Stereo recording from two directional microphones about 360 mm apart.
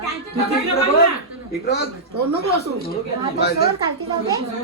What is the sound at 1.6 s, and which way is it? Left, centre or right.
Speech, left.